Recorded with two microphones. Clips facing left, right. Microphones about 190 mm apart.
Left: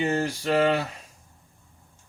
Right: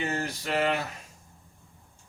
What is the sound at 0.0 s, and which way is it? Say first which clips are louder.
Speech: left 6 dB; 30° left (ahead or behind).